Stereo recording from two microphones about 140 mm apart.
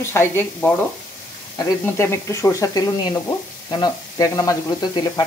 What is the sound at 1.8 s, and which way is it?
Speech, 20° left (ahead or behind).